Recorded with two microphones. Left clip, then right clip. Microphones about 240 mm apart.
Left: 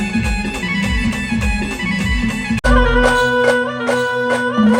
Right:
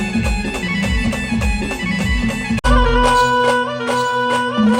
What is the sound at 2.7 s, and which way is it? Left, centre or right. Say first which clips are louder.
Music: left 1 dB; right.